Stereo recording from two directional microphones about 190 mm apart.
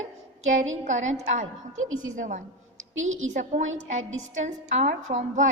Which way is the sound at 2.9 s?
90° right.